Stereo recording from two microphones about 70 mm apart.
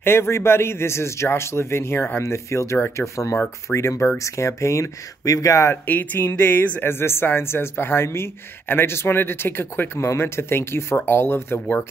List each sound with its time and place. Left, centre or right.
0.0 s speech: left
5.7 s speech: left